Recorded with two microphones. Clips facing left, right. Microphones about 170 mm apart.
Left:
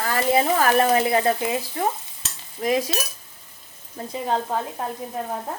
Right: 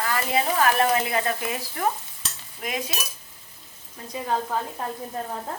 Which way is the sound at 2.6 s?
35° left (ahead or behind).